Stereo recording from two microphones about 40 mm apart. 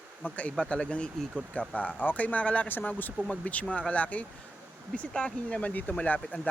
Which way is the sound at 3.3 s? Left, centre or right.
Left.